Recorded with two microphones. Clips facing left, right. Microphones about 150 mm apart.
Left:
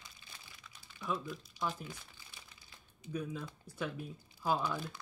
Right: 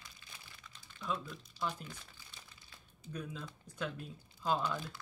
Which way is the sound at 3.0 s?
10° left (ahead or behind).